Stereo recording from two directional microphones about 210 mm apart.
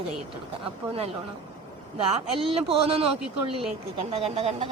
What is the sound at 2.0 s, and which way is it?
A man's voice, 30° right (ahead or behind).